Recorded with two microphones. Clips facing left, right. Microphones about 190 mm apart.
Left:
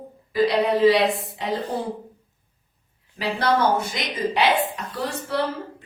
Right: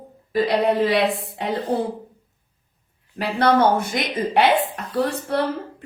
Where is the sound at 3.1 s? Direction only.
55° right (ahead or behind).